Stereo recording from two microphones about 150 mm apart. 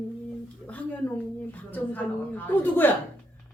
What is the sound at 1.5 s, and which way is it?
A man's voice, 10° left (ahead or behind).